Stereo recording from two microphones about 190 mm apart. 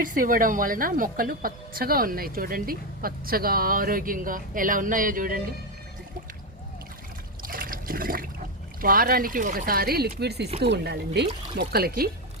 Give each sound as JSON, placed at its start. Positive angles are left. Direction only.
{"t": 0.0, "sound": "a woman's voice", "side_deg": -45}
{"t": 7.4, "sound": "trickle", "side_deg": -50}
{"t": 8.8, "sound": "a woman's voice", "side_deg": -50}